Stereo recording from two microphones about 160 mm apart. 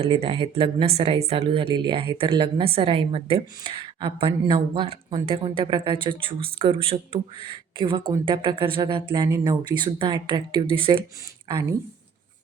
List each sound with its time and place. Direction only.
0.0 s speech: 35° right (ahead or behind)